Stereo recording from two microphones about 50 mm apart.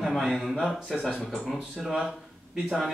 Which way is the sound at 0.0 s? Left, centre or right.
Centre.